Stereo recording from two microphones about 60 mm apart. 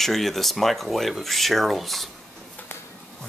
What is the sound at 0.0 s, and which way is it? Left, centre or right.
Speech, centre.